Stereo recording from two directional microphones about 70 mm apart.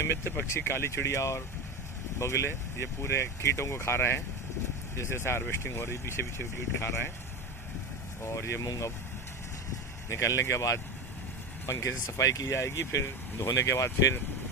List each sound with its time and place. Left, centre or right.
0.3 s speech: left
8.2 s speech: left
8.6 s speech: left
10.1 s speech: left